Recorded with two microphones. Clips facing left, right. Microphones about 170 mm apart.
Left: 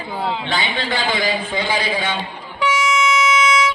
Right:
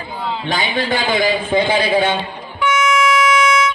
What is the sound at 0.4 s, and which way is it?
A man's voice, 40° right (ahead or behind).